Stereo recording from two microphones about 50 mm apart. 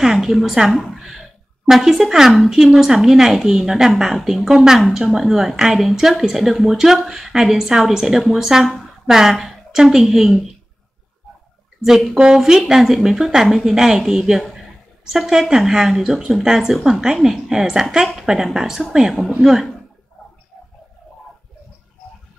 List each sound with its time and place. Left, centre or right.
0.0 s a woman's voice: centre
12.4 s a woman's voice: centre